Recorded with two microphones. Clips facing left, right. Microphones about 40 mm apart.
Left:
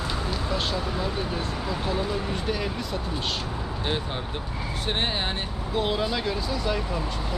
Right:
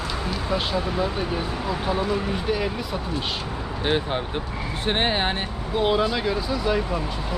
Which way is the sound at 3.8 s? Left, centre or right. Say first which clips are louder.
Right 7 dB; right.